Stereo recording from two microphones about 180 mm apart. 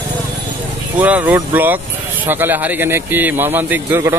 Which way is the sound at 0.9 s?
10° right (ahead or behind).